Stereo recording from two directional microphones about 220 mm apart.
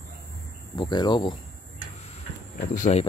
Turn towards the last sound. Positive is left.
turn(degrees=30)  # may be behind; listen again after turning